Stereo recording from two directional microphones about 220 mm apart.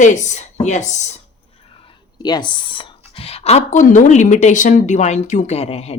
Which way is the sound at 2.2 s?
20° left (ahead or behind).